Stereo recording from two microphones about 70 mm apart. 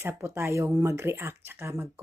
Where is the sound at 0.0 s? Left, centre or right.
Right.